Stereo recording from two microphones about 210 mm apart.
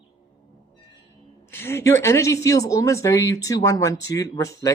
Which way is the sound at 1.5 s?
10° left (ahead or behind).